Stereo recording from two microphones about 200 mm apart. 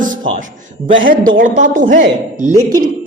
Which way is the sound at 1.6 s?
40° right (ahead or behind).